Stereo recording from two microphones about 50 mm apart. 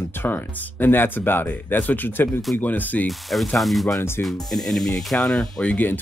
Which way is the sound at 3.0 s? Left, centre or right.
Centre.